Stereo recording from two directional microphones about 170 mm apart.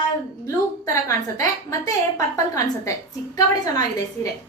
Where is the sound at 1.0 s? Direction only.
20° left (ahead or behind).